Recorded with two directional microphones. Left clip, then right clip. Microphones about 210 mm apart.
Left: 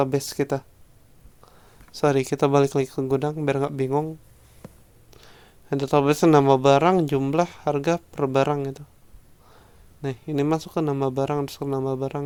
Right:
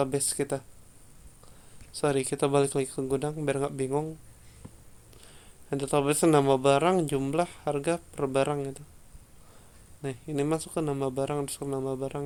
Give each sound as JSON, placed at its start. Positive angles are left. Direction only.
{"t": 0.0, "sound": "speech", "side_deg": 40}
{"t": 2.0, "sound": "speech", "side_deg": 40}
{"t": 5.1, "sound": "speech", "side_deg": 35}
{"t": 10.0, "sound": "speech", "side_deg": 40}